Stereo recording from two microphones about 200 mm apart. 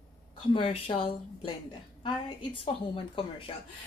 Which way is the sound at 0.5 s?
25° left (ahead or behind).